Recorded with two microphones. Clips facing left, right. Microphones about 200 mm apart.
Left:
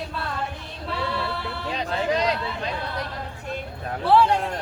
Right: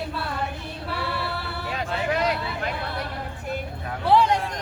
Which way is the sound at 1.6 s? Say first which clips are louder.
Left 2 dB; 20° left (ahead or behind).